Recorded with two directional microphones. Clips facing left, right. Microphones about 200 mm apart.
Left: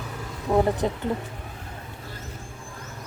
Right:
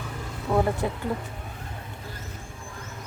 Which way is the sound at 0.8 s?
25° left (ahead or behind).